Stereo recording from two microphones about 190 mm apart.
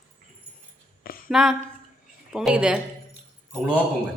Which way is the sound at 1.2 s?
5° right (ahead or behind).